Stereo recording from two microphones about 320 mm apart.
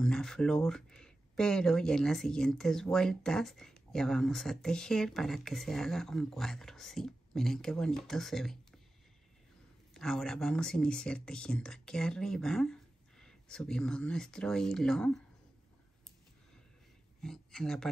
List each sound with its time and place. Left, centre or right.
0.0 s speech: centre
9.9 s speech: centre
17.2 s speech: centre